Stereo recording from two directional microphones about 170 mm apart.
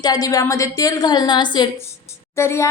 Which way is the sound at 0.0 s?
20° left (ahead or behind).